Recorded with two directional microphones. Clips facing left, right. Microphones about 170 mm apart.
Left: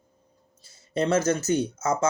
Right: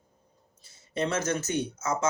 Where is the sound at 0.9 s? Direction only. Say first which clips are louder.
Left 6 dB; 30° left (ahead or behind).